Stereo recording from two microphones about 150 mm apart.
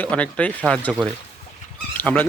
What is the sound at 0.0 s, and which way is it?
Speech, 10° left (ahead or behind).